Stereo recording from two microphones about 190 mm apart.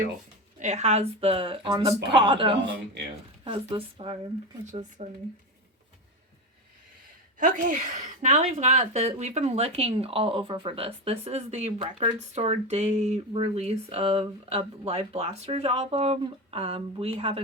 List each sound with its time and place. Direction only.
0.6 s a woman's voice: 35° right (ahead or behind)
7.3 s a woman's voice: 45° right (ahead or behind)